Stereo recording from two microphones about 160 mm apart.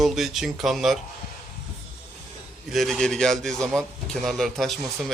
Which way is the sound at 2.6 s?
Centre (ahead or behind).